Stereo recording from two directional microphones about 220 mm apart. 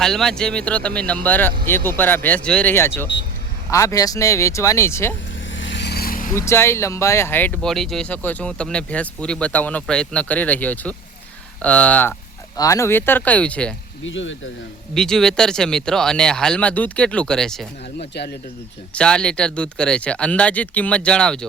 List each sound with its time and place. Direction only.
0.0 s speech: centre (ahead or behind)
5.5 s vehicle: 60° left (ahead or behind); by 6.3 s 40° left (ahead or behind)
6.3 s speech: 10° left (ahead or behind)
14.0 s speech: 60° left (ahead or behind)
14.9 s speech: 5° left (ahead or behind)
18.1 s speech: 50° left (ahead or behind)
18.9 s speech: 5° left (ahead or behind)